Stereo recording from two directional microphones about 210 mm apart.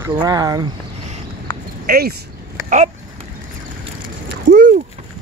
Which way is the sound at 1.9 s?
45° right (ahead or behind).